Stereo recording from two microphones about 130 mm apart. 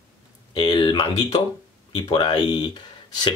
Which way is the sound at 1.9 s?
35° left (ahead or behind).